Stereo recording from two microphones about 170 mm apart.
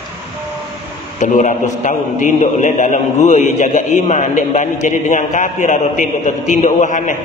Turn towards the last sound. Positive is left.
turn(degrees=45)  # may be behind; listen again after turning